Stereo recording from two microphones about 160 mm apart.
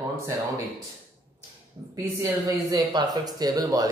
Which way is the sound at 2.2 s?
25° right (ahead or behind).